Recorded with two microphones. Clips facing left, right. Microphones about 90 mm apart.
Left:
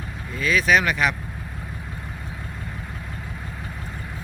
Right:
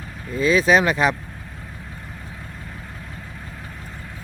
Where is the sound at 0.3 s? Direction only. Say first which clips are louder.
Right 3 dB; 30° right (ahead or behind).